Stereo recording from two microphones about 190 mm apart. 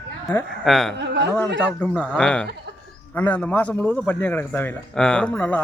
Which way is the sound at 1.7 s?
5° left (ahead or behind).